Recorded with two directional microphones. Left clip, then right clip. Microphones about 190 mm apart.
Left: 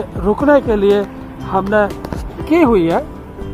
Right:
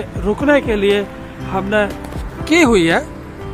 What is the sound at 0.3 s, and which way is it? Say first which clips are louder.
Speech: left 2 dB; centre (ahead or behind).